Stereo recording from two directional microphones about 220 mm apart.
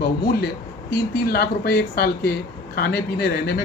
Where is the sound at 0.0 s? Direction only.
45° left (ahead or behind).